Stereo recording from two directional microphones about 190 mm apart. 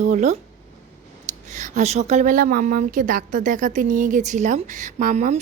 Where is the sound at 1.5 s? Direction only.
40° right (ahead or behind).